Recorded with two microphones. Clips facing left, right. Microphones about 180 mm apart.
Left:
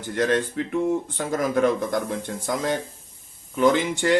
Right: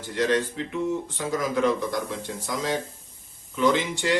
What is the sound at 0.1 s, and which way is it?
Speech, 50° left (ahead or behind).